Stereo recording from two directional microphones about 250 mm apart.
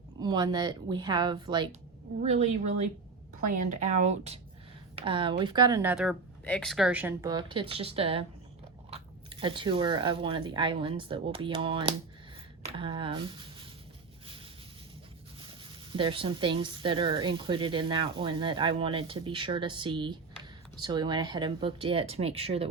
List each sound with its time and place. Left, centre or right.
0.2 s speech: centre
15.4 s speech: centre